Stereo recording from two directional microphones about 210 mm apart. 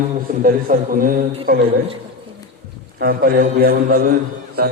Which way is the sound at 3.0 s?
45° right (ahead or behind).